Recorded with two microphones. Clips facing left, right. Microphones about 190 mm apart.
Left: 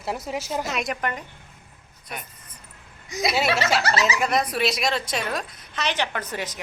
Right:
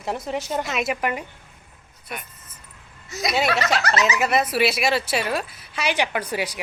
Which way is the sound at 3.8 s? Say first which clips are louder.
Right 1 dB; 30° left (ahead or behind).